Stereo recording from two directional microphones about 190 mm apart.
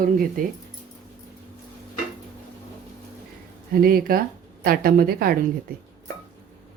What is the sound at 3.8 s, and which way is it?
Speech, 50° right (ahead or behind).